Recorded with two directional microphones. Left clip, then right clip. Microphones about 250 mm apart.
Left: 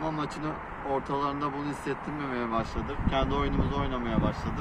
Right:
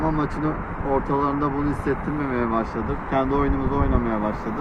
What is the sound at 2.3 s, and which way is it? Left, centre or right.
Speech, centre.